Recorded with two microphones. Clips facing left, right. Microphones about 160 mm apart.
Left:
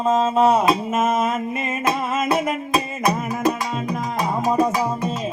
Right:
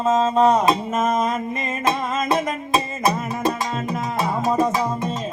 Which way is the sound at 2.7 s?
25° right (ahead or behind).